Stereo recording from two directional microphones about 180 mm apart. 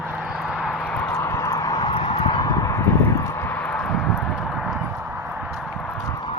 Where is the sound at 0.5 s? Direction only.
Centre (ahead or behind).